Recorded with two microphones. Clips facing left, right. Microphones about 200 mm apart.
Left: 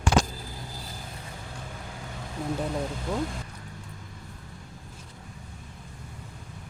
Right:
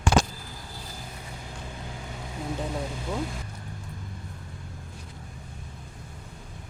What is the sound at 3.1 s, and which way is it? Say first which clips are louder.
Speech: left 1 dB; 5° right (ahead or behind).